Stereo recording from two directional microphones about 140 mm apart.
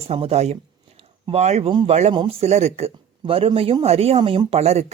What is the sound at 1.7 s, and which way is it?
Speech, 35° right (ahead or behind).